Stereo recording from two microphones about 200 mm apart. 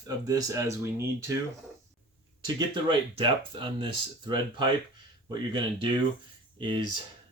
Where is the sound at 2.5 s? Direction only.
25° right (ahead or behind).